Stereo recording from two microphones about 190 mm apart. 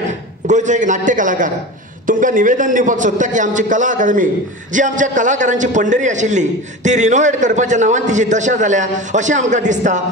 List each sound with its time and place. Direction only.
0.5 s a man's voice: 40° right (ahead or behind)